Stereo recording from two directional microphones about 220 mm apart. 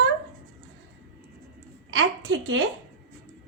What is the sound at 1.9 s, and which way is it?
Speech, 60° right (ahead or behind).